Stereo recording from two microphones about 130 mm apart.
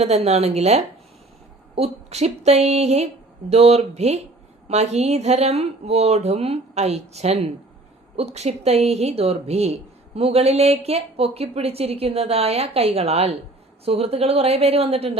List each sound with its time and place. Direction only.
0.0 s a woman's voice: 55° right (ahead or behind)